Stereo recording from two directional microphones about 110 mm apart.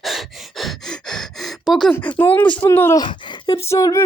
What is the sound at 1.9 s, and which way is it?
Speech, 10° left (ahead or behind).